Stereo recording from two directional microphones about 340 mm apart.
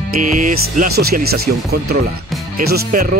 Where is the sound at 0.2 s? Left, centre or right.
Right.